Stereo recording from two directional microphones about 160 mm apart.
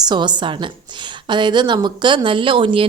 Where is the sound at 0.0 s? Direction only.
25° right (ahead or behind).